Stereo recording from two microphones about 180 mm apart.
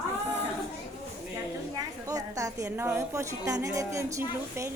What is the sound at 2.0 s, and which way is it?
A woman's voice, 20° right (ahead or behind).